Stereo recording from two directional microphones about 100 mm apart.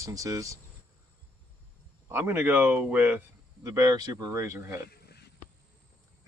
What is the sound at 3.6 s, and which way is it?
Speech, 35° right (ahead or behind).